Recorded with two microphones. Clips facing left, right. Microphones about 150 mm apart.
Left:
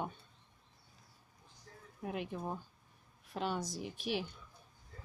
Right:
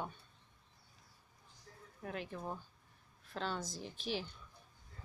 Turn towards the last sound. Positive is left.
turn(degrees=10)  # may be behind; listen again after turning